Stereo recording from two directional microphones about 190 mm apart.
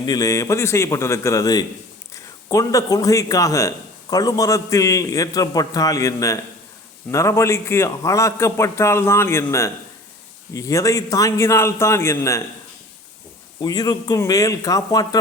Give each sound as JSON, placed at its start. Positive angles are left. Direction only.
{"t": 0.0, "sound": "a man's voice", "side_deg": 20}
{"t": 13.6, "sound": "a man's voice", "side_deg": 20}